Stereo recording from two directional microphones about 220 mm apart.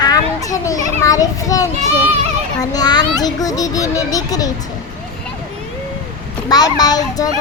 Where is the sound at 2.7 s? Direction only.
15° left (ahead or behind).